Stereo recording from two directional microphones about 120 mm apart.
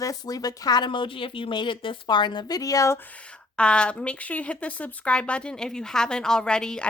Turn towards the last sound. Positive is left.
turn(degrees=5)  # may be behind; listen again after turning